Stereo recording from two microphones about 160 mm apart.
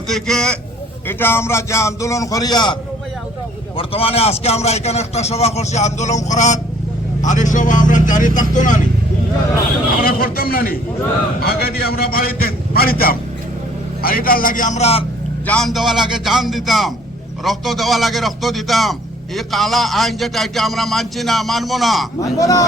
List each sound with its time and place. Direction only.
0.1 s a man's voice: 5° left (ahead or behind); by 2.7 s 25° left (ahead or behind)
3.8 s a man's voice: 35° left (ahead or behind); by 8.8 s 55° left (ahead or behind)
10.0 s a man's voice: 65° left (ahead or behind); by 15.0 s 40° left (ahead or behind)
15.4 s a man's voice: 5° left (ahead or behind)
22.2 s a man's voice: 20° left (ahead or behind)